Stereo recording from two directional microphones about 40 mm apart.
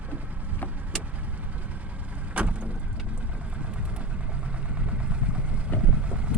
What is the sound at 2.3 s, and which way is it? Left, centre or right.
Vehicle, right.